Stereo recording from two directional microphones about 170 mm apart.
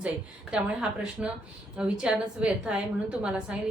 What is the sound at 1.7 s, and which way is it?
A woman's voice, 5° right (ahead or behind).